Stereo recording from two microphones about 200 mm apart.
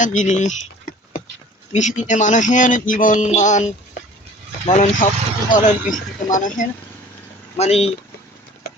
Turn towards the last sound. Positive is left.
turn(degrees=30)  # may be behind; listen again after turning